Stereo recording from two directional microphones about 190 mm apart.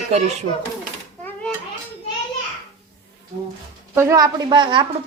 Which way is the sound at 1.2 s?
5° left (ahead or behind).